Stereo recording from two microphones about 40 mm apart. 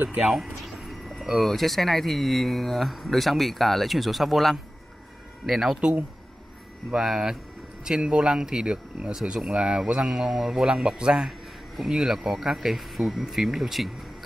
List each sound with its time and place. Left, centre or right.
0.2 s a sound: centre
1.2 s speech: centre
1.5 s speech: centre
6.9 s speech: centre
11.2 s a sound: centre
11.9 s speech: centre